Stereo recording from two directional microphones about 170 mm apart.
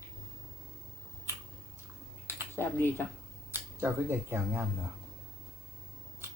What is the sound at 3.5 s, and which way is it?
Speech, 15° right (ahead or behind).